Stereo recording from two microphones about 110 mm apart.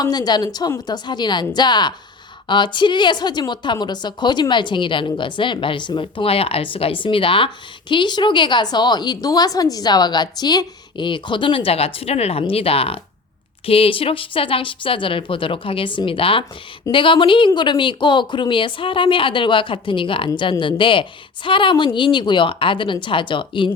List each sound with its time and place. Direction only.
0.0 s a woman's voice: 40° left (ahead or behind)